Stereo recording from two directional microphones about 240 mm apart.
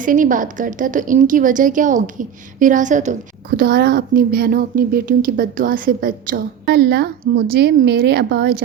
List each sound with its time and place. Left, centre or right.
0.0 s a woman's voice: right